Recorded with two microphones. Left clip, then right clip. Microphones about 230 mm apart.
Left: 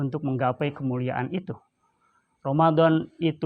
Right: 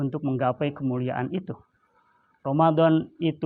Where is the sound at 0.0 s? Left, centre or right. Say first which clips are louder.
Even; left.